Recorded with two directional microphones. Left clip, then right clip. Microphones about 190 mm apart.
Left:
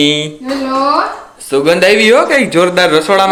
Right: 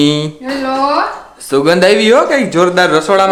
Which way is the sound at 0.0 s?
20° right (ahead or behind).